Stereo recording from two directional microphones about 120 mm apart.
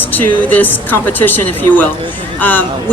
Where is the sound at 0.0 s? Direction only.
15° left (ahead or behind).